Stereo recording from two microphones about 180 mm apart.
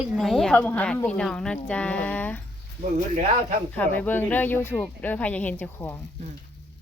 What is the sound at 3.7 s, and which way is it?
Speech, 10° left (ahead or behind).